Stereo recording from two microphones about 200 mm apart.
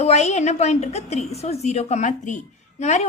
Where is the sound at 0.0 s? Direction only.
35° left (ahead or behind).